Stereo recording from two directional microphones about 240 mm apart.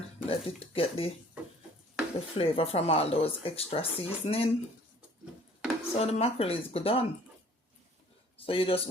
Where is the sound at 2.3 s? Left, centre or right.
Left.